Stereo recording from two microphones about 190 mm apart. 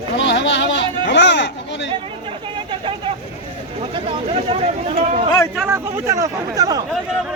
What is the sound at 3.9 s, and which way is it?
Speech, 30° right (ahead or behind).